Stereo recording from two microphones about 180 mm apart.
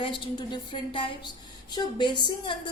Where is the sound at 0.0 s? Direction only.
25° left (ahead or behind).